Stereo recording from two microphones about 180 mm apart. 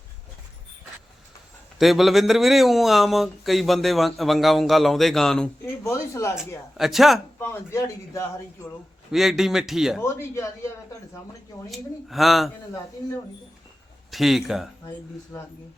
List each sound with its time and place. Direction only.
1.8 s speech: centre (ahead or behind)
5.8 s a man's voice: 15° left (ahead or behind)
6.7 s speech: centre (ahead or behind)
7.3 s a man's voice: 15° left (ahead or behind)
9.1 s speech: centre (ahead or behind)
10.0 s a man's voice: 15° left (ahead or behind)
11.7 s speech: centre (ahead or behind)
14.1 s speech: centre (ahead or behind)
15.3 s a man's voice: 15° left (ahead or behind)